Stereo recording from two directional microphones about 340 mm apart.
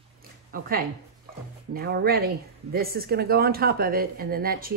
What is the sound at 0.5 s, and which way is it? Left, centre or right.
Speech, right.